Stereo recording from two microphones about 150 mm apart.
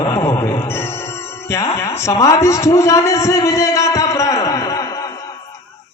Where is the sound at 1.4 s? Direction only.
20° left (ahead or behind).